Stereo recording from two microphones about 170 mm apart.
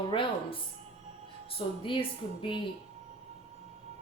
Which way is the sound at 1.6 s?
30° left (ahead or behind).